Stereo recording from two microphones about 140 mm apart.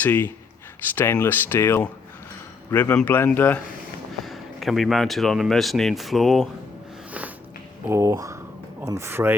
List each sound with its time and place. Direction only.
0.0 s speech: 15° left (ahead or behind)
4.2 s speech: centre (ahead or behind)
7.9 s speech: 20° right (ahead or behind)